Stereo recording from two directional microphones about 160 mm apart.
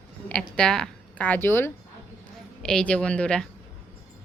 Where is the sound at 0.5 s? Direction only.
5° left (ahead or behind).